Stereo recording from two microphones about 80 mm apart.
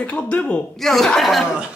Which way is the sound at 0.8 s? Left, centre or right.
Centre.